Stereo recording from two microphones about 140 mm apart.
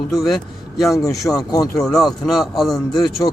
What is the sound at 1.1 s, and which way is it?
Speech, 25° left (ahead or behind).